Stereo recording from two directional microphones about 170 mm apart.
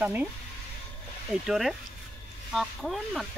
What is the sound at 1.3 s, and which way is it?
Speech, centre (ahead or behind).